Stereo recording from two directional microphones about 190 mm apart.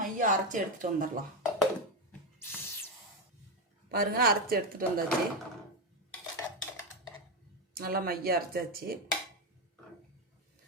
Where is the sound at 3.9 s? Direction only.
55° right (ahead or behind).